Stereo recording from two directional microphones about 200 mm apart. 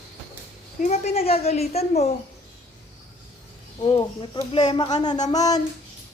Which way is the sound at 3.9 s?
25° left (ahead or behind).